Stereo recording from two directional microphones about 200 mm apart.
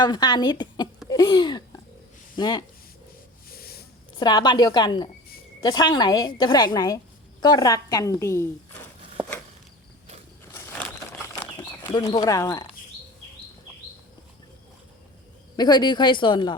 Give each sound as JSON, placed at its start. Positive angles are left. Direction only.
{"t": 0.0, "sound": "speech", "side_deg": 20}
{"t": 3.5, "sound": "a sound", "side_deg": 50}
{"t": 4.2, "sound": "a woman's voice", "side_deg": 20}
{"t": 11.9, "sound": "speech", "side_deg": 20}
{"t": 15.5, "sound": "speech", "side_deg": 20}